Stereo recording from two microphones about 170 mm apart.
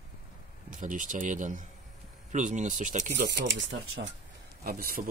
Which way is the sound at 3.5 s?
90° right.